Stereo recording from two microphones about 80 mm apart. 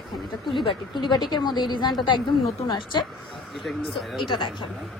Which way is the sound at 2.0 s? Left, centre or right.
Left.